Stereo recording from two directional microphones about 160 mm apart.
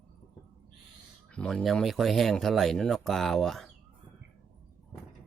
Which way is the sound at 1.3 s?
5° left (ahead or behind).